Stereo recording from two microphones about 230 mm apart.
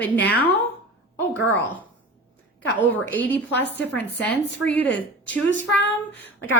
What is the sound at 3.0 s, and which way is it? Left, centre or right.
A woman's voice, centre.